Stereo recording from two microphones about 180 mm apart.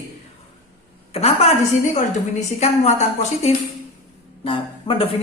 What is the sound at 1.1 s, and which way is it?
A woman's voice, 35° left (ahead or behind).